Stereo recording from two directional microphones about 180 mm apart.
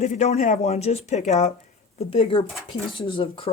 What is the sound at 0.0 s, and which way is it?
Speech, 40° left (ahead or behind).